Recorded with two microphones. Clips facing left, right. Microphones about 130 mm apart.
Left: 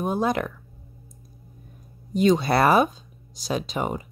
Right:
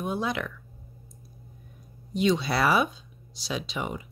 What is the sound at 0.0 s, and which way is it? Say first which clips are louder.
Speech: left 6 dB; 45° left (ahead or behind).